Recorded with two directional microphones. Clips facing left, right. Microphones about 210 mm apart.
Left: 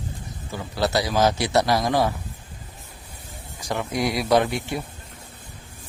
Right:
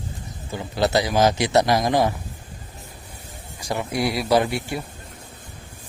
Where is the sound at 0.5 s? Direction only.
20° right (ahead or behind).